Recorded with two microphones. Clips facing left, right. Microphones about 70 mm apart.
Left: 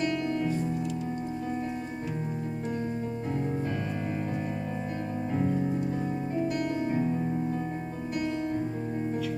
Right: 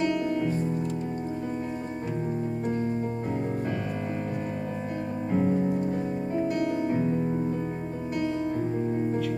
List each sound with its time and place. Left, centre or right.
0.0 s music: centre
5.3 s music: centre